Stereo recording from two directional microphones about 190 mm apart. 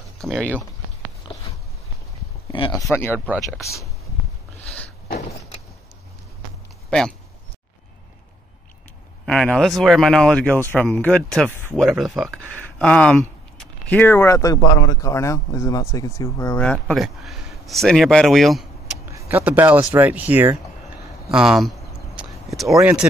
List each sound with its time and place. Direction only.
0.2 s speech: centre (ahead or behind)
2.5 s speech: 25° left (ahead or behind)
2.8 s speech: 15° left (ahead or behind)
6.9 s speech: 5° left (ahead or behind)
9.2 s speech: 5° left (ahead or behind)
19.1 s speech: 10° right (ahead or behind)
21.3 s a sound: 5° right (ahead or behind)
22.6 s speech: centre (ahead or behind)